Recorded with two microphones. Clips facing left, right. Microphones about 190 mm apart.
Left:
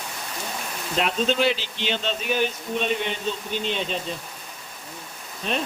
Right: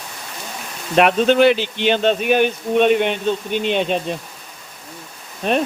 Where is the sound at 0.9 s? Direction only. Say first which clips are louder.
Right 9 dB; 65° right (ahead or behind).